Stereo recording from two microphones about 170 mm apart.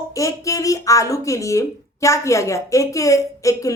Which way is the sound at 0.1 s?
20° left (ahead or behind).